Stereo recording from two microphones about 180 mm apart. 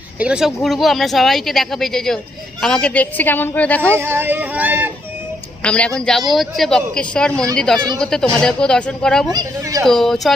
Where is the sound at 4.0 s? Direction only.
10° right (ahead or behind).